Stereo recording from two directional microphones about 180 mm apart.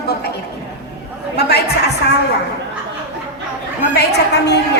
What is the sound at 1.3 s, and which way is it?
Speech, 65° left (ahead or behind).